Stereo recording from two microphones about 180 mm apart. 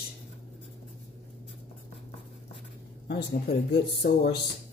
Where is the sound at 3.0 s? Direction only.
65° left (ahead or behind).